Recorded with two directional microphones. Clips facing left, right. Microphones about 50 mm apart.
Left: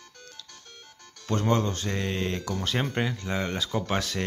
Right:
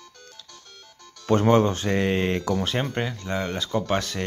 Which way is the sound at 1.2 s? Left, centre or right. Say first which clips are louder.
Right 7 dB; right.